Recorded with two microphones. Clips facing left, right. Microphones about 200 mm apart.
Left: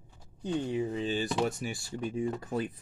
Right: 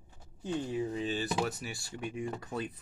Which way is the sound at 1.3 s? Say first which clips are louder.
Left 3 dB; centre (ahead or behind).